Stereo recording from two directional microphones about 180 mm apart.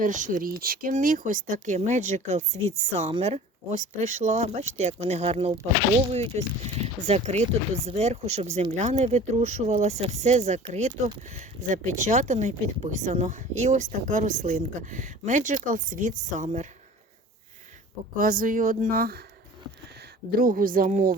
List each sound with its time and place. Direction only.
0.0 s speech: 45° right (ahead or behind)
18.2 s speech: 50° right (ahead or behind)
20.4 s speech: 50° right (ahead or behind)